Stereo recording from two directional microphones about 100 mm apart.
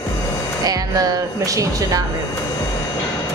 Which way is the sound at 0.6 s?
40° right (ahead or behind).